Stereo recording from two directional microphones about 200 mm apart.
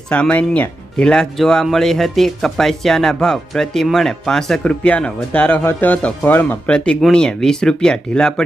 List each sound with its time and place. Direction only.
0.1 s speech: 5° left (ahead or behind)